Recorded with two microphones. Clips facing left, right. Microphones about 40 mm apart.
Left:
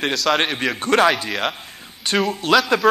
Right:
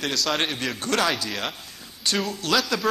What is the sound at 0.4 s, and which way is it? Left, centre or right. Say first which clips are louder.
A man's voice: left 5 dB; left.